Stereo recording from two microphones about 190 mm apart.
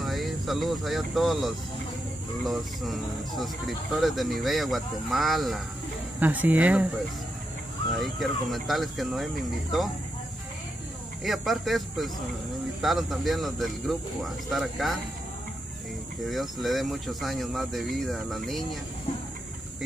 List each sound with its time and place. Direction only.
0.0 s speech: centre (ahead or behind)
8.0 s speech: centre (ahead or behind)
11.2 s speech: centre (ahead or behind)
16.3 s speech: centre (ahead or behind)